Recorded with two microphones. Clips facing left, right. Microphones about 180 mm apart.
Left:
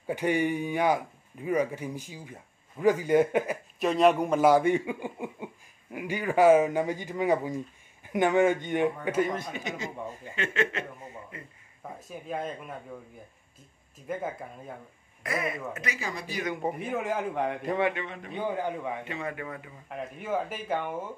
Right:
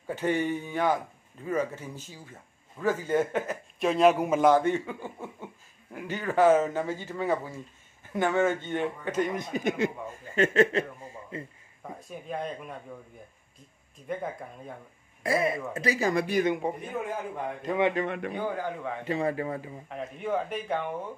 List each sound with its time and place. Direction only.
0.0 s speech: 15° left (ahead or behind)
3.8 s speech: centre (ahead or behind)
4.5 s speech: 10° left (ahead or behind)
9.5 s speech: 50° right (ahead or behind)
10.3 s a man's voice: 40° right (ahead or behind)
12.0 s speech: centre (ahead or behind)
14.1 s speech: 5° left (ahead or behind)
15.2 s a man's voice: 30° right (ahead or behind)
16.1 s speech: 55° right (ahead or behind)
17.0 s a man's voice: 85° left
18.0 s a man's voice: 60° right (ahead or behind)
18.3 s a man's voice: 20° left (ahead or behind)
19.0 s a man's voice: 35° right (ahead or behind)
19.9 s speech: 5° left (ahead or behind)